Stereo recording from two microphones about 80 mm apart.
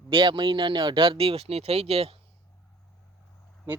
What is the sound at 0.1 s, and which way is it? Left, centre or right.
Speech, right.